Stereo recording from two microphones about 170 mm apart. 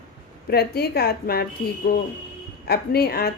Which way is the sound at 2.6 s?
65° left (ahead or behind).